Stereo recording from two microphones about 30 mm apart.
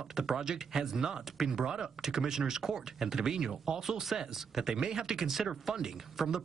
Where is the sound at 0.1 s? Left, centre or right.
Centre.